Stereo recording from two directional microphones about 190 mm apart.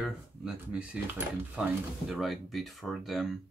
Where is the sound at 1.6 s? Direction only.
5° right (ahead or behind).